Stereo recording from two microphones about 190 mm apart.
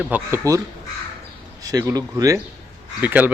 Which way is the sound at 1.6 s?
20° right (ahead or behind).